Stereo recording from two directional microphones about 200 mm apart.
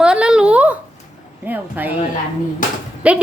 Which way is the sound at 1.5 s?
10° right (ahead or behind).